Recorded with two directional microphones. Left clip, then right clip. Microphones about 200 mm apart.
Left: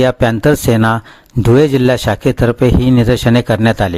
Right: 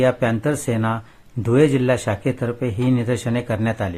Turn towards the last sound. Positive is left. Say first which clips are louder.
# left 10 dB
turn(degrees=50)  # may be behind; listen again after turning